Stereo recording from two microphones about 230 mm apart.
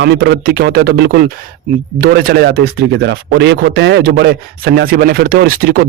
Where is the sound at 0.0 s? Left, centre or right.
Right.